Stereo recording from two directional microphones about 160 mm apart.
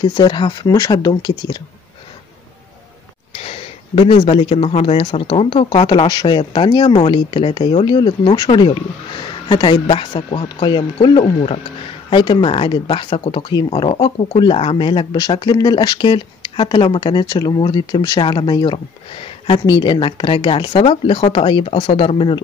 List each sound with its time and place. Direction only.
0.0 s speech: 30° left (ahead or behind)
3.3 s speech: 40° left (ahead or behind)
5.9 s speech: 25° left (ahead or behind)
20.8 s speech: 40° left (ahead or behind)